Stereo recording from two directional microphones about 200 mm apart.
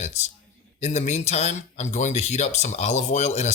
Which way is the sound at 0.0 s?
35° left (ahead or behind).